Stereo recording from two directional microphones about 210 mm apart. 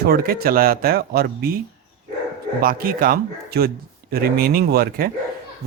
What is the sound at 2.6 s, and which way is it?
Speech, 45° right (ahead or behind).